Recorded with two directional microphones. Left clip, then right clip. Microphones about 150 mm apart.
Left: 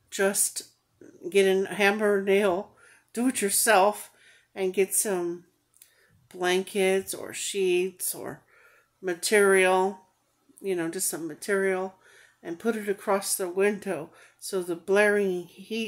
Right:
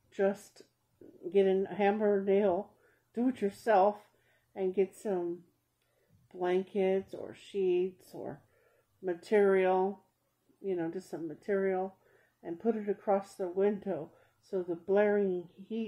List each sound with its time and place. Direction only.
0.1 s speech: 15° left (ahead or behind)
6.4 s speech: 20° left (ahead or behind)
9.0 s speech: 20° left (ahead or behind)